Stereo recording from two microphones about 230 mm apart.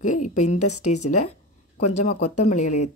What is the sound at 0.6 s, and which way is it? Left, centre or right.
Speech, left.